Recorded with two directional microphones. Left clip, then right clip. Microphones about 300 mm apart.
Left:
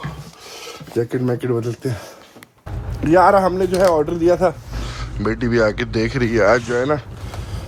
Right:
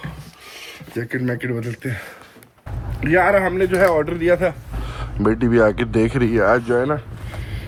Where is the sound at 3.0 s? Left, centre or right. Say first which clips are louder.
Left 3 dB; centre.